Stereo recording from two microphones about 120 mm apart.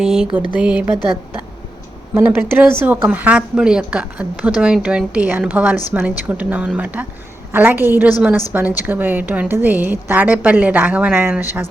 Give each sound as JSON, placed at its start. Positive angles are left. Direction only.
{"t": 0.0, "sound": "a sound", "side_deg": -5}
{"t": 0.5, "sound": "a woman's voice", "side_deg": -10}
{"t": 2.1, "sound": "a woman's voice", "side_deg": -20}